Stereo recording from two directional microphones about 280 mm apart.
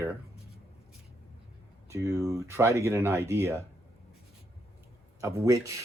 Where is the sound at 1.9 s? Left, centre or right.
Centre.